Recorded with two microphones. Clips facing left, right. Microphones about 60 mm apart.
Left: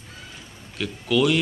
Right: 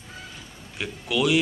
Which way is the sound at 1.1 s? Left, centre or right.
Centre.